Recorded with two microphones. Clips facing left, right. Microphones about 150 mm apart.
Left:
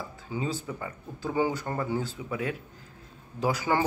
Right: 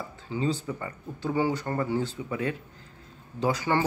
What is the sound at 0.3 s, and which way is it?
Speech, 10° left (ahead or behind).